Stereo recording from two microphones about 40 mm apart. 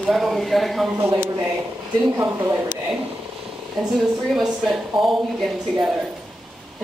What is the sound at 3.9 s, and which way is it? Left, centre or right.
A woman's voice, centre.